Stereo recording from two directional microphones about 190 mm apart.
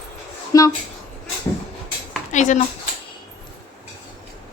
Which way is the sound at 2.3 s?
40° left (ahead or behind).